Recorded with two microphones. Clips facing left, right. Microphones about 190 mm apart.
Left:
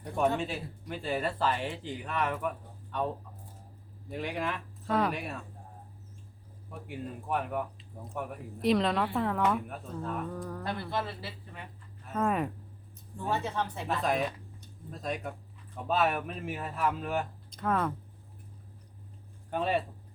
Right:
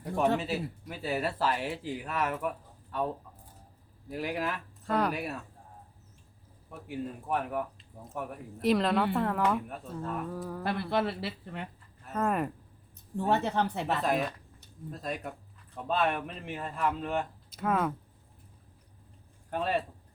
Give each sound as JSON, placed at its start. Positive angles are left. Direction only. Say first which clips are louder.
{"t": 0.0, "sound": "a woman's voice", "louder": "right 1 dB", "side_deg": -5}
{"t": 4.1, "sound": "a woman's voice", "louder": "right 1 dB", "side_deg": -5}
{"t": 6.8, "sound": "a woman's voice", "louder": "right 3 dB", "side_deg": 0}
{"t": 10.6, "sound": "speech", "louder": "right 6 dB", "side_deg": -65}
{"t": 12.0, "sound": "speech", "louder": "even", "side_deg": 0}
{"t": 13.1, "sound": "speech", "louder": "right 4 dB", "side_deg": -65}
{"t": 14.0, "sound": "a woman's voice", "louder": "even", "side_deg": 0}
{"t": 19.5, "sound": "a woman's voice", "louder": "left 1 dB", "side_deg": 0}